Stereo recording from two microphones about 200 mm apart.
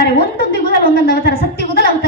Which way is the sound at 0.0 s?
55° left (ahead or behind).